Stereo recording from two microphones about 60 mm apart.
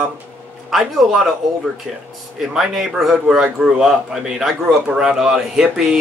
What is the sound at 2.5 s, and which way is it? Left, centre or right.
A man's voice, centre.